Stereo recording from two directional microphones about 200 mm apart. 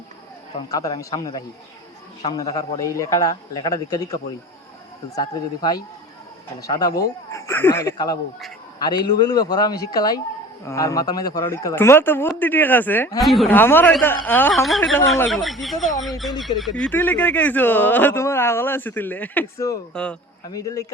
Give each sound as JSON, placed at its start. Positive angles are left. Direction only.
{"t": 0.7, "sound": "a man's voice", "side_deg": 15}
{"t": 13.2, "sound": "speech", "side_deg": 0}
{"t": 19.9, "sound": "speech", "side_deg": 5}
{"t": 20.5, "sound": "speech", "side_deg": 15}